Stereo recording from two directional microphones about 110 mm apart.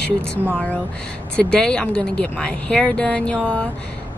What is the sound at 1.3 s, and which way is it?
Speech, 10° left (ahead or behind).